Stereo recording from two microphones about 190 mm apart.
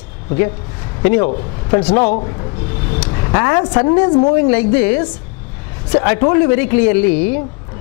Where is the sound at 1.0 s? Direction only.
15° left (ahead or behind).